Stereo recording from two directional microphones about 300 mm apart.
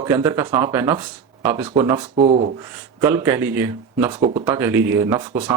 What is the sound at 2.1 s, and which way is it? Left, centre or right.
Speech, right.